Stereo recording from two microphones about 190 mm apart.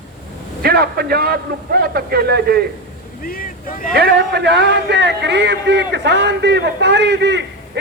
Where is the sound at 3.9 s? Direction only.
55° right (ahead or behind).